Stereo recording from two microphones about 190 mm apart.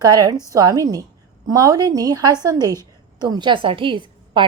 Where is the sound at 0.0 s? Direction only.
20° right (ahead or behind).